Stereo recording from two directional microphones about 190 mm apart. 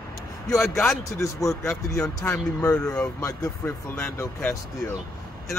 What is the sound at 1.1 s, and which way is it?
Speech, 15° left (ahead or behind).